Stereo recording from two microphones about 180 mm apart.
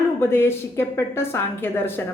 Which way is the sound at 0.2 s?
10° left (ahead or behind).